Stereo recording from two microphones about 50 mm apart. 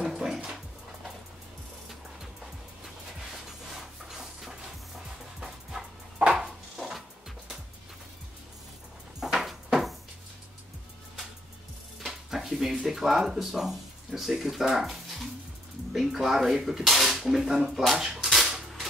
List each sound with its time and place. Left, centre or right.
0.0 s music: centre
2.8 s music: centre
6.3 s a sound: centre
9.2 s a sound: centre
12.1 s speech: centre
18.1 s cap gun: centre